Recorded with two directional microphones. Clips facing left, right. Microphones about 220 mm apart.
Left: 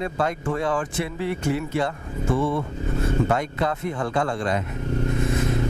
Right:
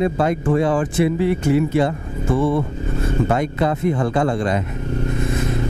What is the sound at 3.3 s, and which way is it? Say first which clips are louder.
Speech: right 5 dB; 10° right (ahead or behind).